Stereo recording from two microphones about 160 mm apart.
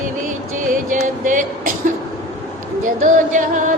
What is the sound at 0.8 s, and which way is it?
Music, 55° right (ahead or behind).